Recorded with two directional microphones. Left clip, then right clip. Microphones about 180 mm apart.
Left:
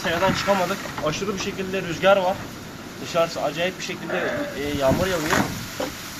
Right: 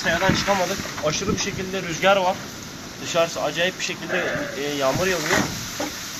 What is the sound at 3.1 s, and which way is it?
Speech, 15° right (ahead or behind).